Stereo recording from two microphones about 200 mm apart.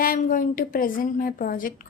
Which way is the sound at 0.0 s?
45° left (ahead or behind).